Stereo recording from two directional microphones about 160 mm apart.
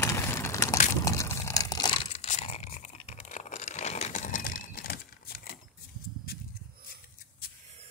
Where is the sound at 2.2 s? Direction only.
40° left (ahead or behind).